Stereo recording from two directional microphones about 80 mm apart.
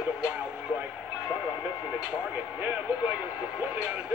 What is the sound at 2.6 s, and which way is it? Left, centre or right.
Speech, right.